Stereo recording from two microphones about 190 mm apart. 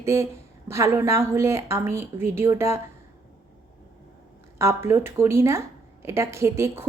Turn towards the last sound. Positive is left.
turn(degrees=-15)  # may be behind; listen again after turning